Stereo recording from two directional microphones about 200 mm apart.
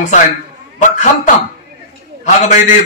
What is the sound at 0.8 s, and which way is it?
Speech, 40° left (ahead or behind).